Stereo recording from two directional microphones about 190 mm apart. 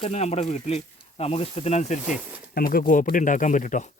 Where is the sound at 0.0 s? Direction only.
35° left (ahead or behind).